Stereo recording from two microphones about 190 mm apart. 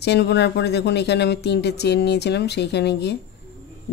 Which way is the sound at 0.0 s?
60° left (ahead or behind).